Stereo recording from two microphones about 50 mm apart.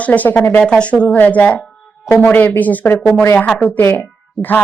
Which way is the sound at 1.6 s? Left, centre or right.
Centre.